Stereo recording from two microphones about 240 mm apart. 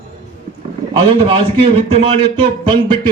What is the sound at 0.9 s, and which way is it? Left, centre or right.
A man's voice, right.